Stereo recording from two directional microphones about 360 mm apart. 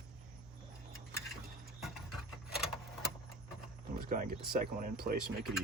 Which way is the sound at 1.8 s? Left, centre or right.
Centre.